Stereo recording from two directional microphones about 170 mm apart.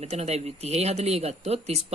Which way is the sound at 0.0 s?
40° right (ahead or behind).